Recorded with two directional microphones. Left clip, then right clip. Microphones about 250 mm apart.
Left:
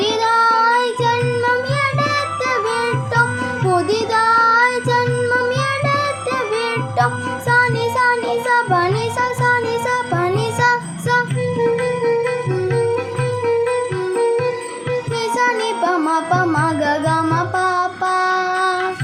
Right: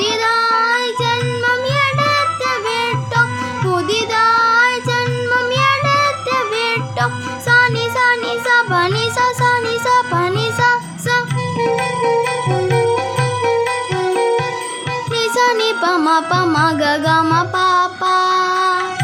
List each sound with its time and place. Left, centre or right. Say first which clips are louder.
0.0 s child singing: even; centre
7.0 s music: left 1 dB; right
11.6 s music: right 1 dB; right
15.2 s music: right 4 dB; right